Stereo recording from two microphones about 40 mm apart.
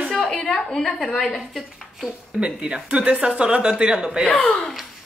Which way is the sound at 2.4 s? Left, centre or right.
Right.